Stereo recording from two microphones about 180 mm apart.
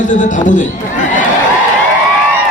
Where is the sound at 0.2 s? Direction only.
45° left (ahead or behind).